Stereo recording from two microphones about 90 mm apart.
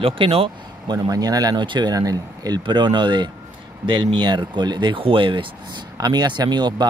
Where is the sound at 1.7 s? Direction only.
55° right (ahead or behind).